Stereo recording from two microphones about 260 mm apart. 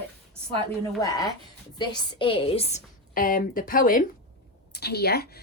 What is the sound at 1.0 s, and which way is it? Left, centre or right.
A woman's voice, centre.